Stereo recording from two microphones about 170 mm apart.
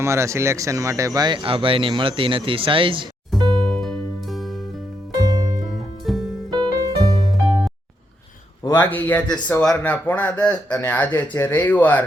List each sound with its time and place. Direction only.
0.0 s speech: 15° right (ahead or behind)
3.6 s music: 5° left (ahead or behind)
5.2 s music: 20° right (ahead or behind)
5.6 s music: centre (ahead or behind)
6.5 s music: 25° right (ahead or behind)
7.4 s music: centre (ahead or behind)
8.6 s a man's voice: 15° left (ahead or behind)